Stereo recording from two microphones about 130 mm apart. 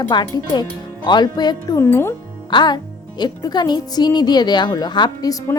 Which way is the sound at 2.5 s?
35° left (ahead or behind).